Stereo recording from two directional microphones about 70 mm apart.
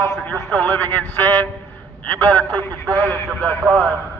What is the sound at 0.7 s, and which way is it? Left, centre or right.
Speech, left.